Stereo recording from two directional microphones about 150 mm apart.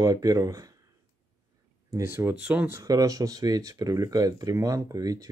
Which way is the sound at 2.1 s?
10° right (ahead or behind).